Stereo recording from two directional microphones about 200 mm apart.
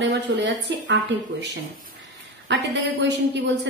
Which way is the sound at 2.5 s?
60° right (ahead or behind).